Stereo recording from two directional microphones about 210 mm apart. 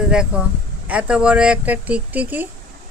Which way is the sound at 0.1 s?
5° right (ahead or behind).